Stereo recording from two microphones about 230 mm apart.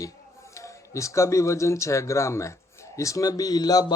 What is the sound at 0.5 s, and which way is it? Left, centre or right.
Speech, centre.